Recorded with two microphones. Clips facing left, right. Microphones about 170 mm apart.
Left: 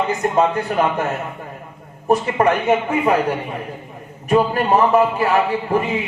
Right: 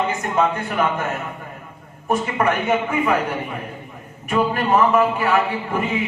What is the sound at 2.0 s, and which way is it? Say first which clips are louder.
A man's voice: left 4 dB; 35° left (ahead or behind).